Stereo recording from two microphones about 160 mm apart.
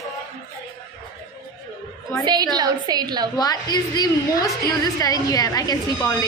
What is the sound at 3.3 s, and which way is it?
A woman's voice, 25° left (ahead or behind).